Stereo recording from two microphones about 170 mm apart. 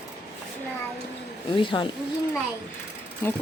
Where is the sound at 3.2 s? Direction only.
15° left (ahead or behind).